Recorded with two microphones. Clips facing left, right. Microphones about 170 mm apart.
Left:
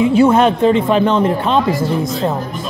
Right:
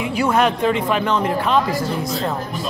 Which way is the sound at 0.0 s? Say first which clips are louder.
Left 7 dB; 25° left (ahead or behind).